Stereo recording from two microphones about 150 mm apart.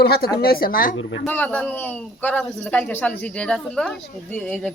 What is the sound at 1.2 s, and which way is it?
Speech, 10° left (ahead or behind).